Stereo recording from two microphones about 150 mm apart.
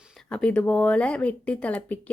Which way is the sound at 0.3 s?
5° left (ahead or behind).